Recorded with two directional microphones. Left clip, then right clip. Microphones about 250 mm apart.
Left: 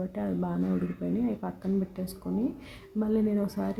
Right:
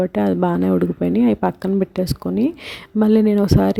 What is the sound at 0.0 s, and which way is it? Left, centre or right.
Speech, right.